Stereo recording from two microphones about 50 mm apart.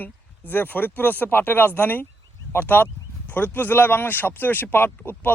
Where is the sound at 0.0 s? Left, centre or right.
Left.